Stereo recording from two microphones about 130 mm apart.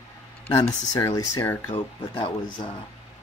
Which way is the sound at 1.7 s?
45° left (ahead or behind).